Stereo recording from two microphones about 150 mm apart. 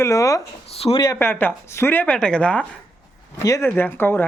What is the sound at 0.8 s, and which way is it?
Speech, 40° left (ahead or behind).